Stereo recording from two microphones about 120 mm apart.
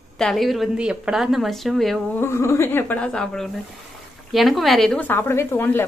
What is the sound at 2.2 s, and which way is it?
A woman's voice, 20° left (ahead or behind).